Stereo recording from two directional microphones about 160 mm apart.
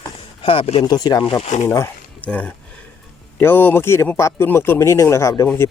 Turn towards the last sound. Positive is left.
turn(degrees=20)  # may be behind; listen again after turning